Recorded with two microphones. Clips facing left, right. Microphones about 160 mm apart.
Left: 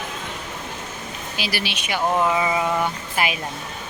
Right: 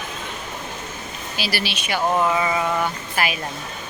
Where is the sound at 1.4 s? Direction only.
15° left (ahead or behind).